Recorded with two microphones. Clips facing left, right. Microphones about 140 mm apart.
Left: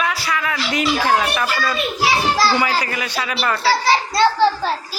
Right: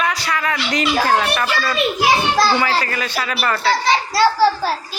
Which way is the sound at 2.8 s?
15° left (ahead or behind).